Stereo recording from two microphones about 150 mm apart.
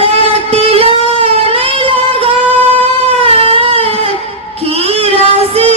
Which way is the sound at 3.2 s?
40° right (ahead or behind).